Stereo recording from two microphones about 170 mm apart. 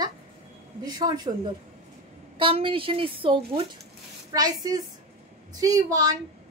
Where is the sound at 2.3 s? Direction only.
30° right (ahead or behind).